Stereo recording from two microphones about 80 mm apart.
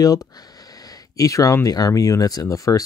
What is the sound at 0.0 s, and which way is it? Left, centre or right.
Speech, left.